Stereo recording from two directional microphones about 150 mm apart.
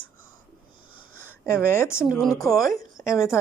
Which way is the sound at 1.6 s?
15° left (ahead or behind).